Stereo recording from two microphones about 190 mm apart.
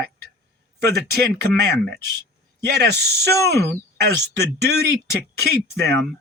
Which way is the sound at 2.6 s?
60° right (ahead or behind).